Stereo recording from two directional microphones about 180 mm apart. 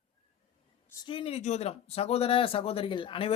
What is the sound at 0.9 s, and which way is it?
A man's voice, 30° left (ahead or behind).